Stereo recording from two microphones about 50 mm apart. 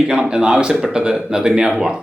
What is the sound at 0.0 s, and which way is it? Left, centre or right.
Speech, centre.